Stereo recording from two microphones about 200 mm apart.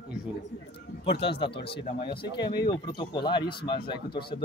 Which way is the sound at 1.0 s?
30° left (ahead or behind).